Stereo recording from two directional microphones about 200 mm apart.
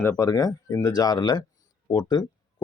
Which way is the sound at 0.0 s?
15° left (ahead or behind).